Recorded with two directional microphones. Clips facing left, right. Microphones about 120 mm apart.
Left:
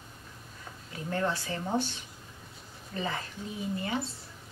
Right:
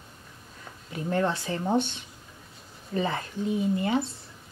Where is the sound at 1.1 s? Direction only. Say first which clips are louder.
Right 4 dB; 25° right (ahead or behind).